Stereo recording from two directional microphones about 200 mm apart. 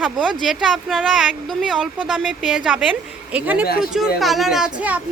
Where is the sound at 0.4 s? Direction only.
Centre (ahead or behind).